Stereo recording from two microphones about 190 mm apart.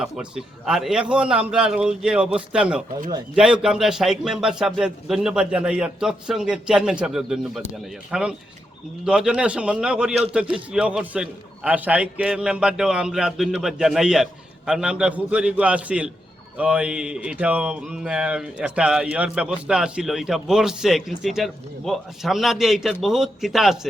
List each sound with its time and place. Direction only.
0.0 s speech: 5° right (ahead or behind)